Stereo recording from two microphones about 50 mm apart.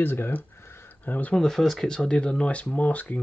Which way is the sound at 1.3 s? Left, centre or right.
Centre.